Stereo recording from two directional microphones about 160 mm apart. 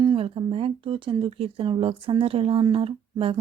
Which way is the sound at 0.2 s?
35° right (ahead or behind).